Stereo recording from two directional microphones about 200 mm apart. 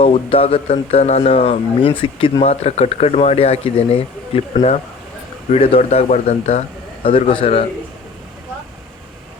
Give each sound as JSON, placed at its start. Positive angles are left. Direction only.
{"t": 0.0, "sound": "speech", "side_deg": 30}